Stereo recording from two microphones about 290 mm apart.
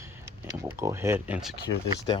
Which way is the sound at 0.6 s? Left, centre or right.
Centre.